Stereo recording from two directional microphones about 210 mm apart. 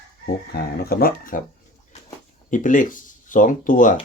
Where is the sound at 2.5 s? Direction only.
40° left (ahead or behind).